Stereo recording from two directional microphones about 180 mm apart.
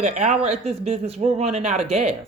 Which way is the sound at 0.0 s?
40° right (ahead or behind).